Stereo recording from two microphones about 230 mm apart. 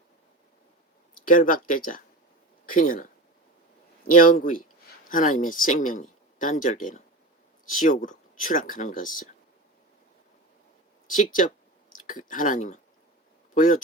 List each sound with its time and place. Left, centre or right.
1.3 s speech: left
11.1 s speech: left